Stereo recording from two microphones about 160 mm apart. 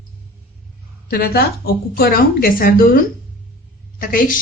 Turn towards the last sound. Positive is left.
turn(degrees=60)  # may be behind; listen again after turning